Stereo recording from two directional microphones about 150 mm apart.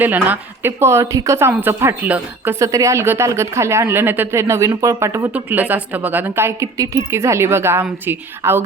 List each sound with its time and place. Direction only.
0.0 s a woman's voice: 10° right (ahead or behind)